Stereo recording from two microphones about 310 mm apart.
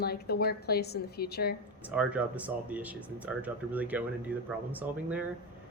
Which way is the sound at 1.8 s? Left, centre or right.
Centre.